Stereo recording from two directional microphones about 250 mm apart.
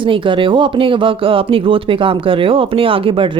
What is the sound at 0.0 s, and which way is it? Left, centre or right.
Speech, centre.